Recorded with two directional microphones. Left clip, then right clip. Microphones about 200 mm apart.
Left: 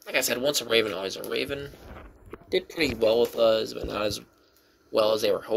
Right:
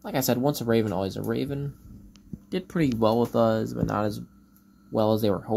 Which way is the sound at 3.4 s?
30° left (ahead or behind).